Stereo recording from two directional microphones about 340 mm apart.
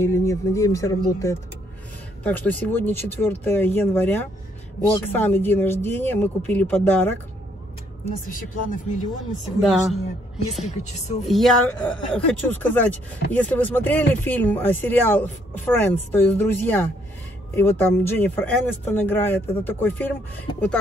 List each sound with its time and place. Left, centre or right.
0.0 s speech: centre
8.0 s speech: left
9.6 s speech: centre
10.6 s speech: centre
11.2 s speech: centre